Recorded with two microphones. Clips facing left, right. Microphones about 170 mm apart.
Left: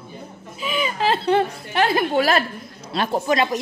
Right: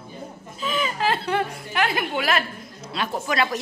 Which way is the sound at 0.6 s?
15° left (ahead or behind).